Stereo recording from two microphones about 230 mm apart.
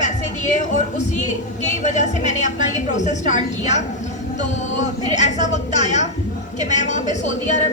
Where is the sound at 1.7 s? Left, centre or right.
Left.